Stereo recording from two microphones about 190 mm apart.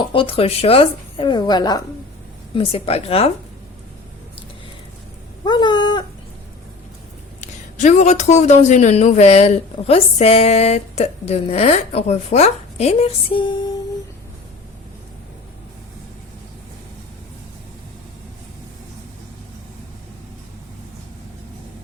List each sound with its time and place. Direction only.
0.0 s a woman's voice: 30° left (ahead or behind)
5.5 s a sound: 25° left (ahead or behind)
7.4 s a man's voice: 40° left (ahead or behind); by 13.8 s 20° left (ahead or behind)